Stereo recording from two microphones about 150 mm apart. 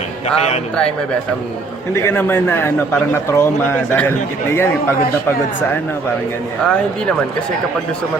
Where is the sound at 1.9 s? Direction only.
15° left (ahead or behind).